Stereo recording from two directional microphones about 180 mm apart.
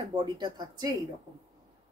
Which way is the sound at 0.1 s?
25° right (ahead or behind).